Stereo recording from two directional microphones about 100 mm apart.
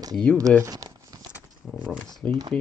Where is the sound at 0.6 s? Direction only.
40° right (ahead or behind).